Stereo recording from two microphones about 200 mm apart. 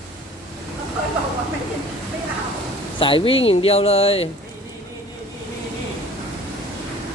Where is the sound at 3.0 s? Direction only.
25° left (ahead or behind).